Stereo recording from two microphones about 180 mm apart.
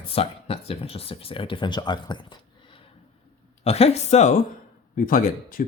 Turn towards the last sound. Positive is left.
turn(degrees=50)  # may be behind; listen again after turning